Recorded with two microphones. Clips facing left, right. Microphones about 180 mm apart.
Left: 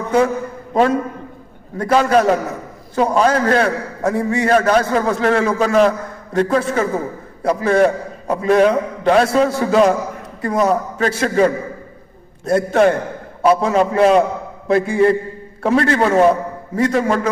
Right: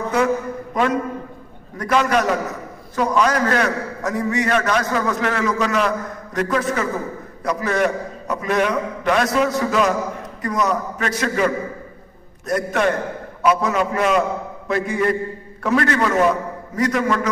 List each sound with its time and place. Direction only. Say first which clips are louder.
0.1 s a man's voice: left 4 dB; 30° left (ahead or behind)